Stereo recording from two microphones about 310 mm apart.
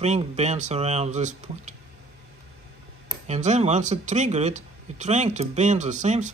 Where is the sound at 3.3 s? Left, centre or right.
Right.